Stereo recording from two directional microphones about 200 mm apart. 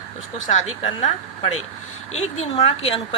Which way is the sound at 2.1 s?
30° left (ahead or behind).